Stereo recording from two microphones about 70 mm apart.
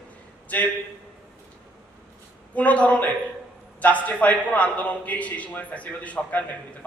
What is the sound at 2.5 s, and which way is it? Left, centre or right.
A man's voice, centre.